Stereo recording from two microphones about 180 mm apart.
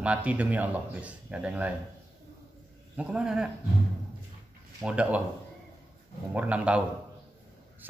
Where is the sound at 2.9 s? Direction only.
5° right (ahead or behind).